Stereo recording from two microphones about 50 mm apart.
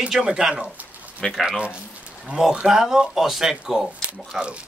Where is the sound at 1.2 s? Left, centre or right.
Centre.